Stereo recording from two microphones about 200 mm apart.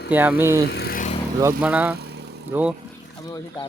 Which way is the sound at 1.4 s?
5° right (ahead or behind).